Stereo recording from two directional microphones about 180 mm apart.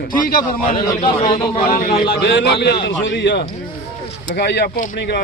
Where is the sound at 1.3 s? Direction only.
55° left (ahead or behind).